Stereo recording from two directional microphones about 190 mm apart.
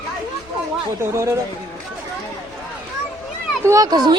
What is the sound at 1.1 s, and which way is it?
Speech, 15° right (ahead or behind).